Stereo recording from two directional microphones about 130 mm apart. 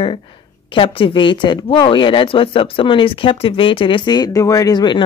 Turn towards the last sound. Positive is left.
turn(degrees=35)  # may be behind; listen again after turning